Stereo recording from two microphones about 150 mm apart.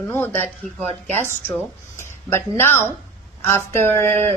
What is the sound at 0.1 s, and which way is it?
Speech, 15° left (ahead or behind).